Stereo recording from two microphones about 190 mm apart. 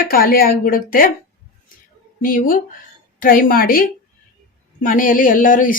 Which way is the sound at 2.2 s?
45° left (ahead or behind).